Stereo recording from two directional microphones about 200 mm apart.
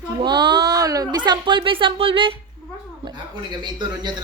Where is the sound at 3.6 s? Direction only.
20° right (ahead or behind).